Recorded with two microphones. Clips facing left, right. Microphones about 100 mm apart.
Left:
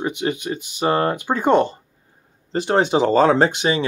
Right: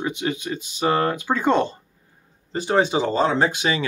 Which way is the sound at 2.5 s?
55° left (ahead or behind).